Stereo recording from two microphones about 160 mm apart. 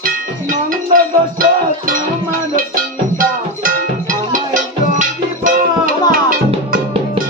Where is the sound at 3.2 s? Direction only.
60° right (ahead or behind).